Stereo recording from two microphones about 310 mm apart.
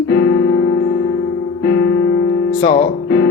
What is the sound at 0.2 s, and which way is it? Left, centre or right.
Music, left.